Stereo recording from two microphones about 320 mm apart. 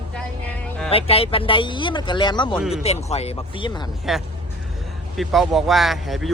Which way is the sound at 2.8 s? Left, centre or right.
Centre.